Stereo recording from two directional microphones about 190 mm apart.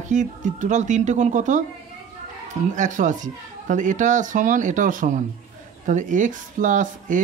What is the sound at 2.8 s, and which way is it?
Speech, 40° right (ahead or behind).